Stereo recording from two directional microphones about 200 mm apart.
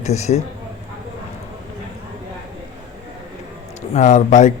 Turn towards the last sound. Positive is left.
turn(degrees=35)  # may be behind; listen again after turning